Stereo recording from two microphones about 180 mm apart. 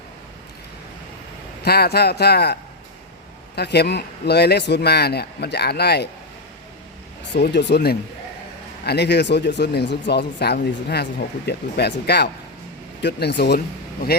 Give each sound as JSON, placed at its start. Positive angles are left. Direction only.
{"t": 1.6, "sound": "speech", "side_deg": 60}
{"t": 7.3, "sound": "speech", "side_deg": 70}